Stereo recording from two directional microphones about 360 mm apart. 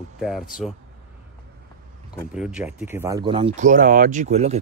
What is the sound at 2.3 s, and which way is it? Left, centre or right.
Speech, centre.